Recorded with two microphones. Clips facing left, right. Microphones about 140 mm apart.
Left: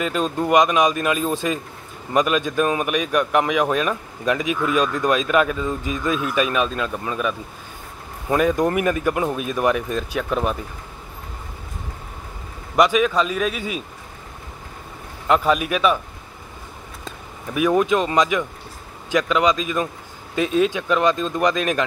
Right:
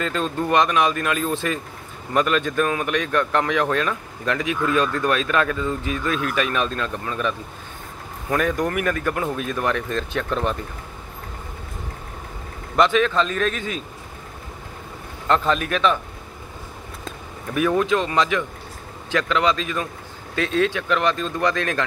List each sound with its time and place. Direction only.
0.0 s a man's voice: 15° left (ahead or behind)
6.6 s a man's voice: 5° left (ahead or behind)
8.3 s a man's voice: 20° left (ahead or behind)
12.7 s a man's voice: 10° left (ahead or behind)
15.2 s a man's voice: 10° left (ahead or behind)
17.6 s a man's voice: 15° left (ahead or behind)